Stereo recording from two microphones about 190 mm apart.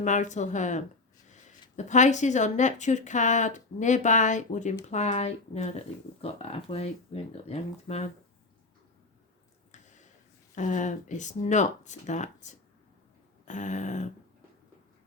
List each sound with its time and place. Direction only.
0.0 s speech: 40° left (ahead or behind)
10.5 s speech: 40° left (ahead or behind)